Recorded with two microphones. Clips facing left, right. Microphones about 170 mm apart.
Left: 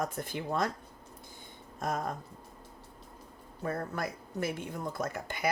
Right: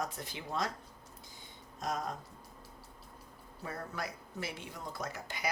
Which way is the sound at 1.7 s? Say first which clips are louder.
Left 3 dB; 55° left (ahead or behind).